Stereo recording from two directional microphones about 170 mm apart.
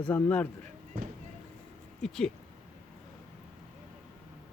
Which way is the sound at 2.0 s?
5° left (ahead or behind).